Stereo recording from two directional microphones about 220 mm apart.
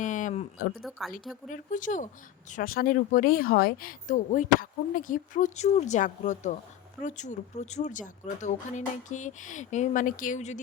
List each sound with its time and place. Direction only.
0.0 s speech: 35° left (ahead or behind)
0.8 s speech: centre (ahead or behind)
1.5 s speech: 35° left (ahead or behind)